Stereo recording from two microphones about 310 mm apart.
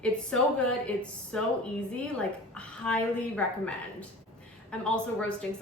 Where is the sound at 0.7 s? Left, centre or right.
Centre.